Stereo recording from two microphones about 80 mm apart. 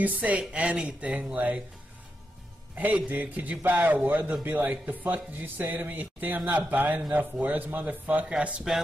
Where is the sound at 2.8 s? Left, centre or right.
Right.